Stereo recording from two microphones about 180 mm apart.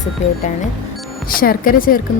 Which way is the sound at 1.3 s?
50° left (ahead or behind).